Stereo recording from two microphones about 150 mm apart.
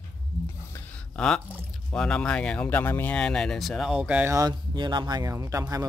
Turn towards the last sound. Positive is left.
turn(degrees=-25)  # may be behind; listen again after turning